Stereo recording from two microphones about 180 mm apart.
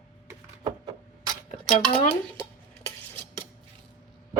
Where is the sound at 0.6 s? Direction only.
25° right (ahead or behind).